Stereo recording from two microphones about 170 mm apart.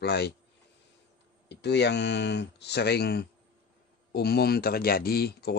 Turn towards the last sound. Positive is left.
turn(degrees=70)  # may be behind; listen again after turning